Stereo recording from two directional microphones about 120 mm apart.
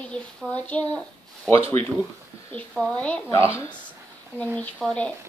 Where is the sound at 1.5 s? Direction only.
55° right (ahead or behind).